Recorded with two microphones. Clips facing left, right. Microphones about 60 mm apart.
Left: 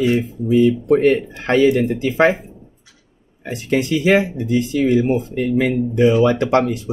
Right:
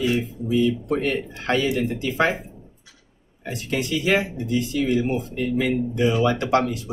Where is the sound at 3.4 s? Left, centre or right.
Left.